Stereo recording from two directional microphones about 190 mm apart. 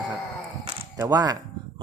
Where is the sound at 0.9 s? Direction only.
20° right (ahead or behind).